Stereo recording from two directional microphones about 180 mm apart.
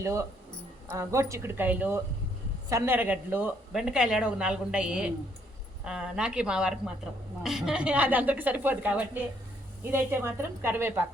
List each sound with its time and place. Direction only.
0.0 s a woman's voice: 15° right (ahead or behind)